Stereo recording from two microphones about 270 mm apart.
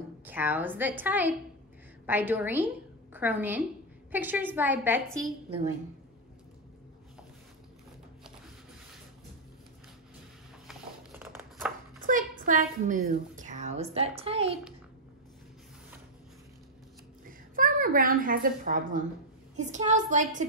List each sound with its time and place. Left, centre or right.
0.2 s a woman's voice: centre
10.7 s a sound: centre
12.1 s a woman's voice: right
17.3 s a woman's voice: right